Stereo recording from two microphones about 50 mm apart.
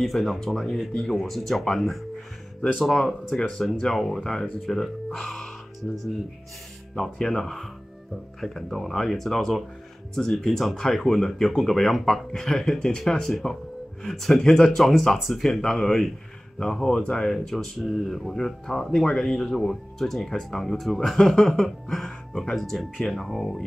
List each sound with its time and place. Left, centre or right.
0.0 s speech: centre
5.8 s speech: left
7.0 s speech: centre